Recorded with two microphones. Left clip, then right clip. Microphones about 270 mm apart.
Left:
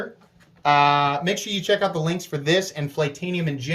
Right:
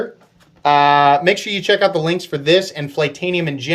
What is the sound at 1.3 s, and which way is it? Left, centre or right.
Speech, right.